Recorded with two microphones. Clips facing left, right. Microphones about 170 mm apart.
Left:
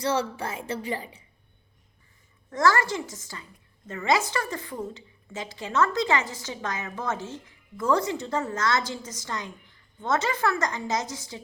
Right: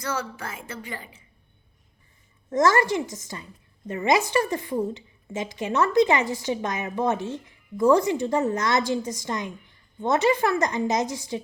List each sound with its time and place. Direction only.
0.0 s a woman's voice: 30° left (ahead or behind)
2.5 s a woman's voice: 20° right (ahead or behind)